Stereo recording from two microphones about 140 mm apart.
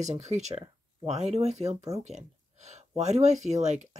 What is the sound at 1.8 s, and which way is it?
Speech, 25° right (ahead or behind).